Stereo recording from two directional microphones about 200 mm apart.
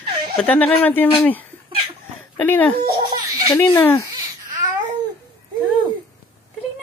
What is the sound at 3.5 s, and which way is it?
Speech, 10° left (ahead or behind).